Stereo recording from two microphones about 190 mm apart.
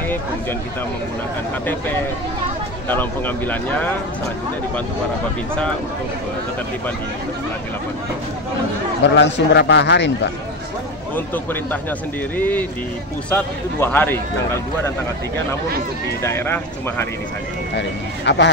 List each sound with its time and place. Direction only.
2.9 s a man's voice: 10° left (ahead or behind)
9.0 s a man's voice: 70° left (ahead or behind)
11.1 s a man's voice: 10° left (ahead or behind)
16.2 s a man's voice: 15° left (ahead or behind)
17.7 s a man's voice: 65° left (ahead or behind)